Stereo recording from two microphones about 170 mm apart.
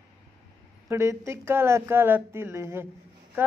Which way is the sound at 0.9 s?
15° right (ahead or behind).